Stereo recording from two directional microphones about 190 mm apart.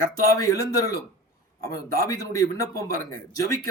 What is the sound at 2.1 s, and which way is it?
Speech, 20° left (ahead or behind).